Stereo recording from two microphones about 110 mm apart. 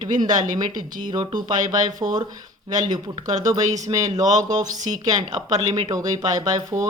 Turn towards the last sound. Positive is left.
turn(degrees=-35)  # may be behind; listen again after turning